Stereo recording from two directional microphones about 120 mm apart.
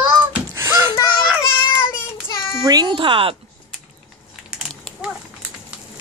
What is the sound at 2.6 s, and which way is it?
Baby cry, 35° right (ahead or behind).